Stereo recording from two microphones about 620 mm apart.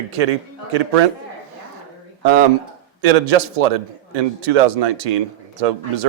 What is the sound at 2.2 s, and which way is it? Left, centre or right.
Speech, right.